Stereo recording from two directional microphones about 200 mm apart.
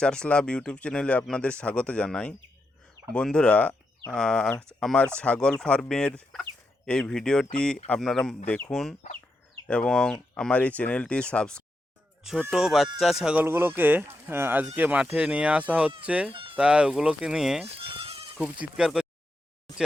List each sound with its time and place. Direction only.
0.0 s speech: 5° left (ahead or behind)
16.3 s a sound: 25° right (ahead or behind)
16.6 s speech: 5° right (ahead or behind)
17.7 s bleat: 30° right (ahead or behind)
18.6 s speech: 5° right (ahead or behind)